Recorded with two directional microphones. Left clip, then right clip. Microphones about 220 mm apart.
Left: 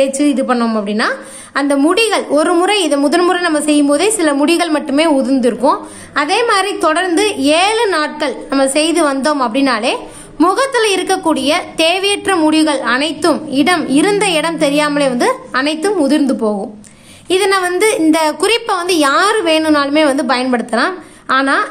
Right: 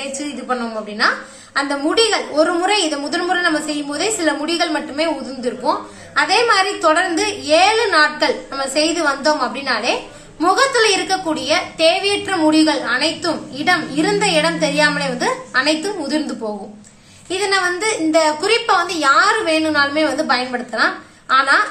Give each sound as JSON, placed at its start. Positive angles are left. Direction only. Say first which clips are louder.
{"t": 0.0, "sound": "a woman's voice", "louder": "left 13 dB", "side_deg": 50}